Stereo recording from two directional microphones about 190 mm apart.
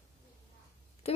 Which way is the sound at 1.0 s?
30° left (ahead or behind).